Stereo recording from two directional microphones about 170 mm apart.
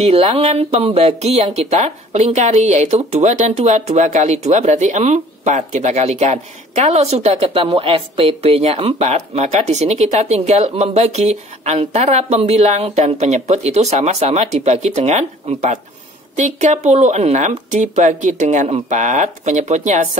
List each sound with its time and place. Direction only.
0.0 s speech: 40° right (ahead or behind)